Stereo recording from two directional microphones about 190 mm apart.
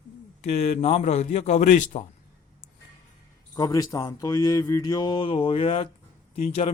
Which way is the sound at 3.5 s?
20° left (ahead or behind).